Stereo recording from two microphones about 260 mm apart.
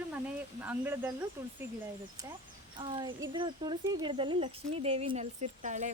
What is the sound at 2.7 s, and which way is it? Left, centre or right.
Speech, centre.